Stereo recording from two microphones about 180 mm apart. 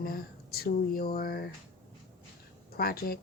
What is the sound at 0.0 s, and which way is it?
Speech, 55° left (ahead or behind).